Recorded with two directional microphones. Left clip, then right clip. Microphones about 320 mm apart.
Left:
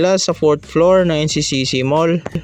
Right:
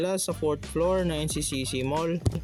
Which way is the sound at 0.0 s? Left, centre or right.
Right.